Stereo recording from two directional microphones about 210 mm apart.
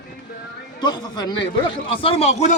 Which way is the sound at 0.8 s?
20° left (ahead or behind).